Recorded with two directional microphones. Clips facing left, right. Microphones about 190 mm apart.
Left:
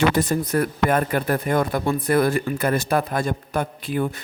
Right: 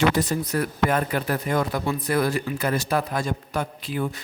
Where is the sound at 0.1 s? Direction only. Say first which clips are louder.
Left 3 dB; 50° left (ahead or behind).